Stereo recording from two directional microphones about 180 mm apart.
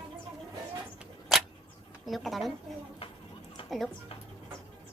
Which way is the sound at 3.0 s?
35° left (ahead or behind).